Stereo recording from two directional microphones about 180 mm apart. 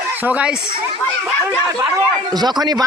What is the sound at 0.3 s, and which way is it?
Speech, 5° right (ahead or behind).